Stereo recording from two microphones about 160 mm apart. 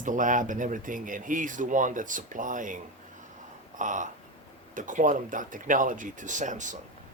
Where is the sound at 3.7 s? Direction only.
50° right (ahead or behind).